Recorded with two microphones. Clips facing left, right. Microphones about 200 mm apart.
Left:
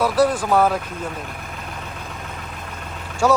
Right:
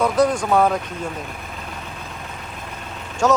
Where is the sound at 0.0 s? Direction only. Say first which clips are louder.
Even; 5° left (ahead or behind).